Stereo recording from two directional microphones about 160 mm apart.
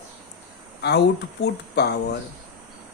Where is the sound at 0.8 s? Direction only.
90° left.